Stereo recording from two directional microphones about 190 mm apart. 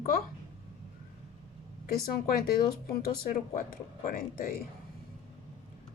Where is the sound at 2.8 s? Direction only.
50° left (ahead or behind).